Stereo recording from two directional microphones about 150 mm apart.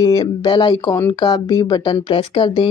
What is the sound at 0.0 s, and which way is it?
Speech, 25° left (ahead or behind).